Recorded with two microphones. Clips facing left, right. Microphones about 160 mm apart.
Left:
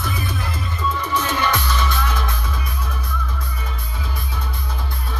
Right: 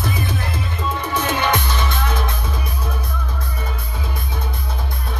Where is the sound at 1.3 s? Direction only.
25° right (ahead or behind).